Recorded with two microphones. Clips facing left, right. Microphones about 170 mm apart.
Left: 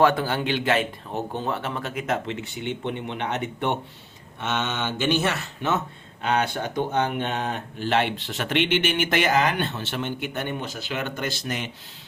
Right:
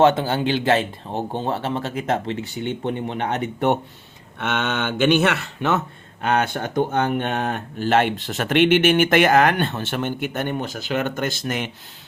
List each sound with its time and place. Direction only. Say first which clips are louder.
0.0 s a man's voice: right 4 dB; 25° right (ahead or behind); by 3.8 s 45° right (ahead or behind)
4.4 s speech: right 4 dB; 65° right (ahead or behind)
6.2 s speech: right 3 dB; 50° right (ahead or behind)